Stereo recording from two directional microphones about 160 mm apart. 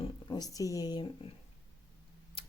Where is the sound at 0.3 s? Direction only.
20° left (ahead or behind).